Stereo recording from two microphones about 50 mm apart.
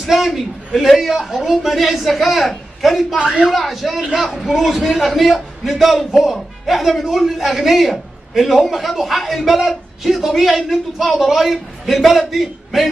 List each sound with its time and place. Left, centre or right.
0.0 s a sound: centre
0.7 s speech: centre
3.2 s speech: centre
3.4 s speech: centre